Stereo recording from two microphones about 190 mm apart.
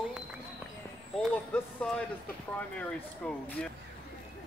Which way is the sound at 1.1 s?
5° left (ahead or behind).